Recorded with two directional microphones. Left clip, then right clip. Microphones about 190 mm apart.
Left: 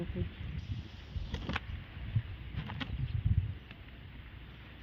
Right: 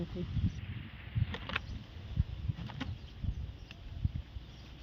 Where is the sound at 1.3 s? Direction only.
30° right (ahead or behind).